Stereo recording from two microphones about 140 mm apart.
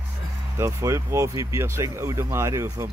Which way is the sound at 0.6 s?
20° right (ahead or behind).